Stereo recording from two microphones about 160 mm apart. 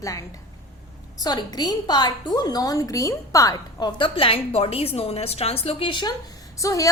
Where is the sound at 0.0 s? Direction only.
20° left (ahead or behind).